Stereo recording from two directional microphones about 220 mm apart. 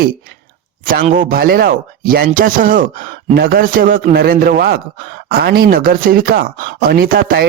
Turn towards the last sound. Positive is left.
turn(degrees=-40)  # may be behind; listen again after turning